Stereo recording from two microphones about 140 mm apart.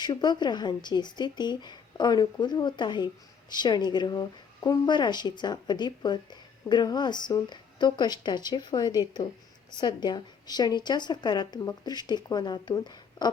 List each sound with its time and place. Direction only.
0.0 s a woman's voice: 30° left (ahead or behind)